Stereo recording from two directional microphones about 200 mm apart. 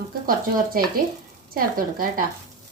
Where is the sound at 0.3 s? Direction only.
45° right (ahead or behind).